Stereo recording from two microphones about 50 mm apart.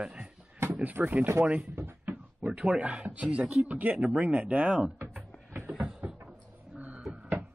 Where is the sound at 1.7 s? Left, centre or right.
Right.